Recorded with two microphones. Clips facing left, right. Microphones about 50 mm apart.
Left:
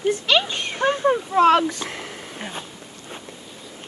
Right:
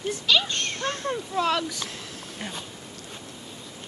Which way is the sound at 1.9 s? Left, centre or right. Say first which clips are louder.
Left 5 dB; left.